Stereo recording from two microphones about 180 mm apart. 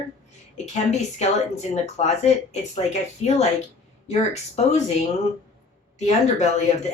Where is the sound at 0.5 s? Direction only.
40° left (ahead or behind).